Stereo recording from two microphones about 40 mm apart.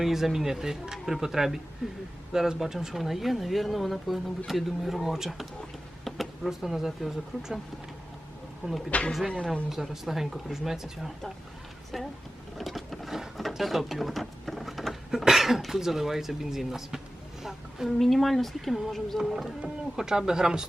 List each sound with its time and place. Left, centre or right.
0.0 s speech: centre
8.9 s speech: left
9.6 s speech: centre
12.5 s sewing machine: centre
13.5 s a sound: centre
15.1 s speech: centre
17.8 s speech: centre
19.6 s speech: centre